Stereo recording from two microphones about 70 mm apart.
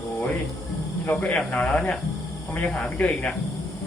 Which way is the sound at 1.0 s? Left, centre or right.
Centre.